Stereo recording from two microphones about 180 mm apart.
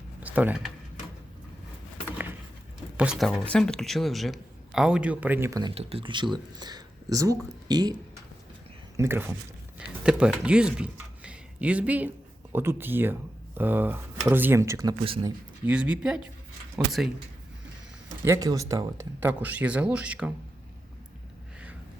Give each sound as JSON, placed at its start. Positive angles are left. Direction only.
{"t": 0.2, "sound": "speech", "side_deg": -10}
{"t": 2.0, "sound": "a sound", "side_deg": -10}
{"t": 3.0, "sound": "speech", "side_deg": 0}
{"t": 5.7, "sound": "speech", "side_deg": -30}
{"t": 9.0, "sound": "speech", "side_deg": -10}
{"t": 15.0, "sound": "speech", "side_deg": -30}
{"t": 15.6, "sound": "speech", "side_deg": -5}
{"t": 18.3, "sound": "speech", "side_deg": -20}